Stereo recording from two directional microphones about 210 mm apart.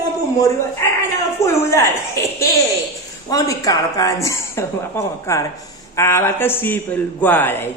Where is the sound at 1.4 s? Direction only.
15° left (ahead or behind).